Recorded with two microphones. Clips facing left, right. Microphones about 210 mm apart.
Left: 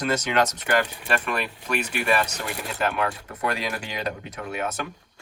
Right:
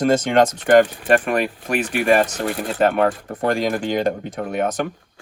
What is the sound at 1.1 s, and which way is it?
Speech, 45° right (ahead or behind).